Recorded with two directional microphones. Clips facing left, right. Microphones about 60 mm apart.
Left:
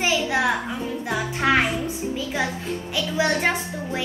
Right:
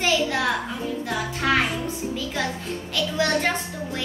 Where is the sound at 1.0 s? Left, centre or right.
Left.